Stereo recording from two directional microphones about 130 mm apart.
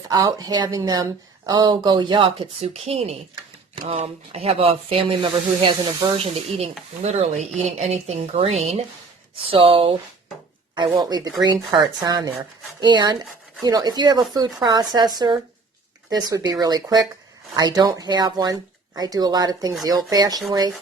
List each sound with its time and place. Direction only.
0.1 s speech: 30° right (ahead or behind)
10.8 s speech: 30° right (ahead or behind)